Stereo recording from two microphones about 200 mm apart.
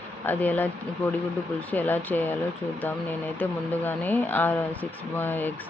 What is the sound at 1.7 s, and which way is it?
Speech, 10° left (ahead or behind).